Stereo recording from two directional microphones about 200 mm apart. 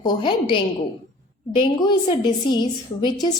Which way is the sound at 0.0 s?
25° left (ahead or behind).